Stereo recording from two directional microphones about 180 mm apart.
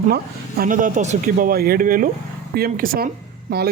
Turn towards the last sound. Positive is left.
turn(degrees=-60)  # may be behind; listen again after turning